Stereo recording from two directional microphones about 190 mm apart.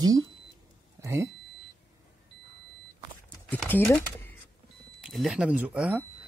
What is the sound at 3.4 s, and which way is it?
Speech, 10° left (ahead or behind).